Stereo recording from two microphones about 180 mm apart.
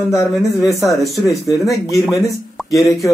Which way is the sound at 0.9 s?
Centre (ahead or behind).